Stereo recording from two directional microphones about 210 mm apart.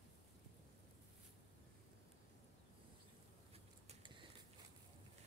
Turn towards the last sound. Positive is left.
turn(degrees=-25)  # may be behind; listen again after turning